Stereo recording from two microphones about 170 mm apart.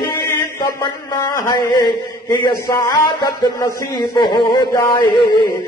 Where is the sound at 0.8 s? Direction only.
20° left (ahead or behind).